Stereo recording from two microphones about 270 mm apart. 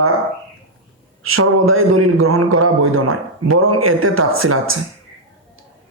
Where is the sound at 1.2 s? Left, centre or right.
Right.